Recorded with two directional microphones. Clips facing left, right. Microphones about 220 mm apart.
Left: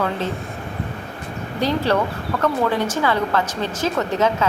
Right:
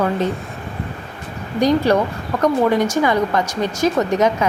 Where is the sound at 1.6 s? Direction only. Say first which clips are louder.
Right 5 dB; 15° right (ahead or behind).